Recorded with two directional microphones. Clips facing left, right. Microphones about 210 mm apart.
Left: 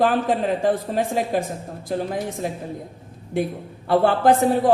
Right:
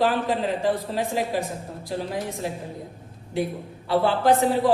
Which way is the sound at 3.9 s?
50° left (ahead or behind).